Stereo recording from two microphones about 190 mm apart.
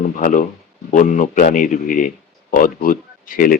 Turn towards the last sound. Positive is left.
turn(degrees=50)  # may be behind; listen again after turning